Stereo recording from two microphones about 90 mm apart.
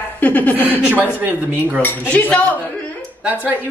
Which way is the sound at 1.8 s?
20° left (ahead or behind).